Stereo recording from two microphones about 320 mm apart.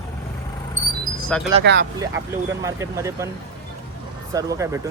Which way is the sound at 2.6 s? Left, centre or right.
Centre.